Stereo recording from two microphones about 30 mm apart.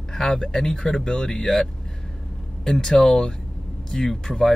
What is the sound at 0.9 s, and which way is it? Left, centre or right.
Speech, left.